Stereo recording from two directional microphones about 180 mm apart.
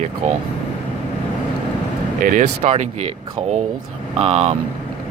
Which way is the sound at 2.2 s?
45° right (ahead or behind).